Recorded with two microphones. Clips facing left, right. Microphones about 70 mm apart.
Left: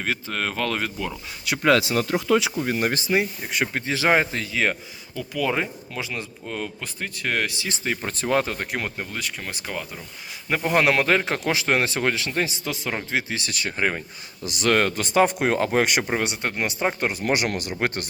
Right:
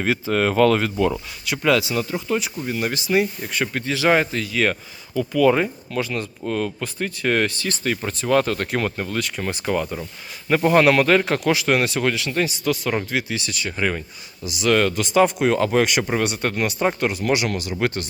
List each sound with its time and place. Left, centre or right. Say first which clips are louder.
0.0 s speech: right 7 dB; centre
1.5 s speech: even; left
2.0 s speech: left 1 dB; left
2.2 s speech: left 3 dB; left
2.6 s speech: left 1 dB; left
3.1 s speech: right 3 dB; centre
5.1 s speech: right 8 dB; centre
8.0 s speech: right 2 dB; left
8.3 s speech: right 4 dB; left
8.5 s speech: right 5 dB; centre
11.4 s speech: right 3 dB; left
14.4 s speech: right 2 dB; left
16.1 s speech: right 3 dB; centre
17.0 s speech: right 2 dB; left